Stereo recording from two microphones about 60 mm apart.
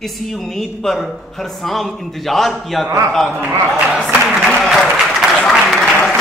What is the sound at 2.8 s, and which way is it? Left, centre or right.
Speech, right.